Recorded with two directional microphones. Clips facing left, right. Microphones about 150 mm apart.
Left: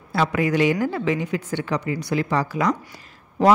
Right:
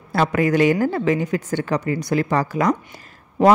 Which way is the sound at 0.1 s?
50° right (ahead or behind).